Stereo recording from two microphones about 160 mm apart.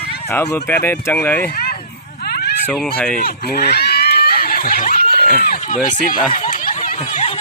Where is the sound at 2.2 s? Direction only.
80° left.